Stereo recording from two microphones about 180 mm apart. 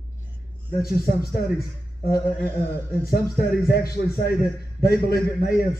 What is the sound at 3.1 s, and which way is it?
A man's voice, 60° left (ahead or behind).